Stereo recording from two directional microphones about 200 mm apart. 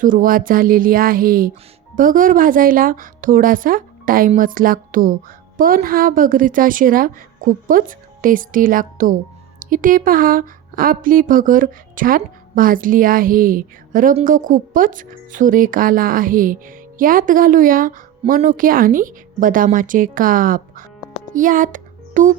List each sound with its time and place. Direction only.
0.0 s a woman's voice: 45° right (ahead or behind)
21.3 s music: 40° right (ahead or behind)